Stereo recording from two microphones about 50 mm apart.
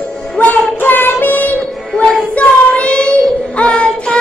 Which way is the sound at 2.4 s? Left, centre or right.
Left.